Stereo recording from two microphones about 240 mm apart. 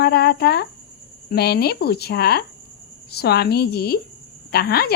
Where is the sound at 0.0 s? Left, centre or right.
Left.